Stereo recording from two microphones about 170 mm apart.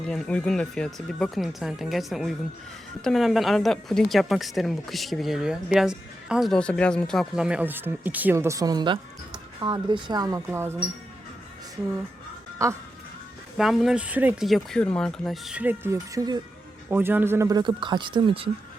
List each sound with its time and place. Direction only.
0.0 s a woman's voice: 5° left (ahead or behind); by 10.8 s 15° right (ahead or behind)
13.6 s a woman's voice: centre (ahead or behind)
17.6 s speech: 30° right (ahead or behind)